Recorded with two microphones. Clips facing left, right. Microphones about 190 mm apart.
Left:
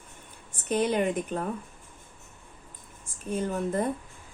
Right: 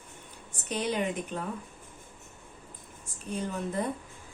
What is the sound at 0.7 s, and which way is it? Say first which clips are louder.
Speech: left 5 dB; 50° left (ahead or behind).